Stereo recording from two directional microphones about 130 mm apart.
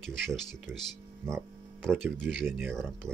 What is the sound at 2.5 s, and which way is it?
Speech, 15° right (ahead or behind).